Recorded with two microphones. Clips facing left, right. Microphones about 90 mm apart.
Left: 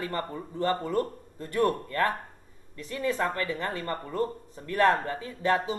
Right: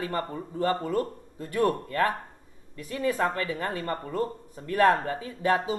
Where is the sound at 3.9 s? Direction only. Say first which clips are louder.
Right 1 dB; 30° right (ahead or behind).